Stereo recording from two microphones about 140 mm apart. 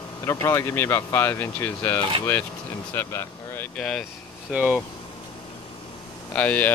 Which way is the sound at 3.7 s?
5° left (ahead or behind).